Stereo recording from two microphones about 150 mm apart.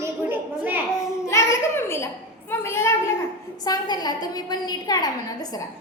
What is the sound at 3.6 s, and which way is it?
A woman's voice, 25° left (ahead or behind).